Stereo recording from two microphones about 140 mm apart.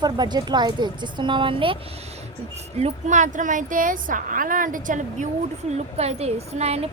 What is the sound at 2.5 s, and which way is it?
Speech, 55° right (ahead or behind).